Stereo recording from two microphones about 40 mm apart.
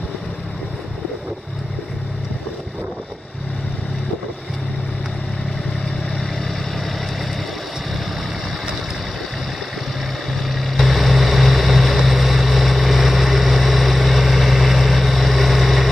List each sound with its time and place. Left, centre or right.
10.4 s vehicle: centre